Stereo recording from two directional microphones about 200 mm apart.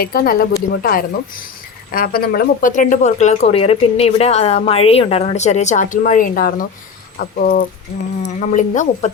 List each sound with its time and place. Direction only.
0.0 s speech: 45° left (ahead or behind)